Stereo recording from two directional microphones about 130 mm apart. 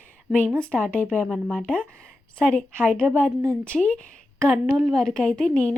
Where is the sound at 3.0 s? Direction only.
15° right (ahead or behind).